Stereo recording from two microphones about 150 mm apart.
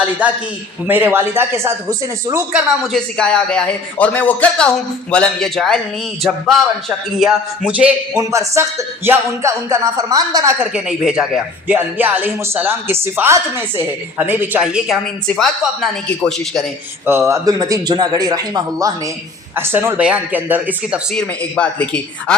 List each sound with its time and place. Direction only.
0.2 s speech: 10° right (ahead or behind)
2.5 s speech: 5° right (ahead or behind)
8.1 s a man's voice: 20° right (ahead or behind)
10.6 s speech: 5° right (ahead or behind)
17.1 s a man's voice: 20° right (ahead or behind)
21.1 s speech: 5° left (ahead or behind)